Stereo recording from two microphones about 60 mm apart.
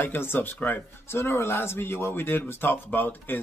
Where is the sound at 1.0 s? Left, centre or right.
Left.